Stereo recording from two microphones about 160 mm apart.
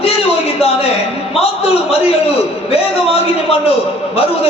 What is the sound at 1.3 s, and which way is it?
A man's voice, 40° left (ahead or behind).